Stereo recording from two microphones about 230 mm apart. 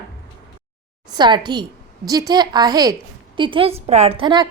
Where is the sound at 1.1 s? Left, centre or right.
Centre.